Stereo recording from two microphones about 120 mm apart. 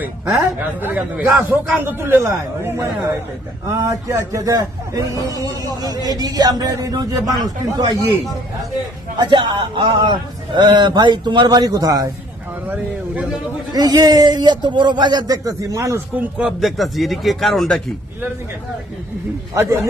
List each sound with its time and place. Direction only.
0.0 s a man's voice: 15° right (ahead or behind)
9.2 s speech: 40° right (ahead or behind)
12.6 s speech: 10° right (ahead or behind)
13.7 s speech: 35° right (ahead or behind)
16.1 s speech: 5° right (ahead or behind)
19.5 s speech: 25° right (ahead or behind)